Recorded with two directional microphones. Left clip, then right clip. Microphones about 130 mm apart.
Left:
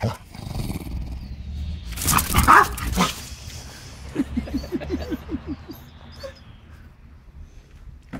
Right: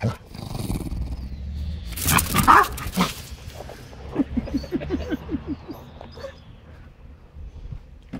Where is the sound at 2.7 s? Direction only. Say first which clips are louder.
Left 2 dB; 25° right (ahead or behind).